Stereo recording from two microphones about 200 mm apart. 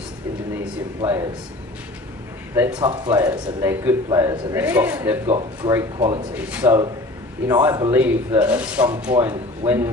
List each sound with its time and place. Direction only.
1.0 s speech: 20° right (ahead or behind)
2.7 s speech: 20° right (ahead or behind)
3.2 s a man's voice: 10° right (ahead or behind)
5.2 s speech: 30° right (ahead or behind)
5.6 s speech: 15° right (ahead or behind)
6.3 s a man's voice: 5° right (ahead or behind)
7.9 s a man's voice: 10° right (ahead or behind)